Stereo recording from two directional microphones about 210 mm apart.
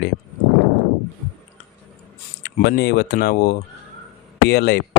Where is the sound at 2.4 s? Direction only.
50° left (ahead or behind).